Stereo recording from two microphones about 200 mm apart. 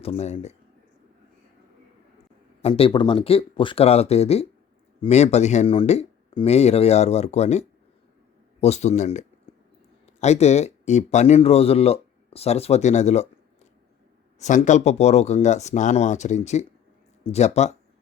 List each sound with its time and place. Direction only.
0.0 s speech: 30° left (ahead or behind)
2.6 s speech: 30° left (ahead or behind)
14.3 s speech: 35° left (ahead or behind)